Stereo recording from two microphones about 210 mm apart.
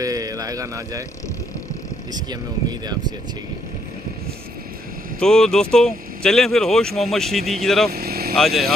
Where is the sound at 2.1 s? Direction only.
20° right (ahead or behind).